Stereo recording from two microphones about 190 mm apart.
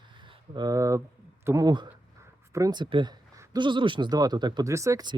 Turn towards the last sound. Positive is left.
turn(degrees=-15)  # may be behind; listen again after turning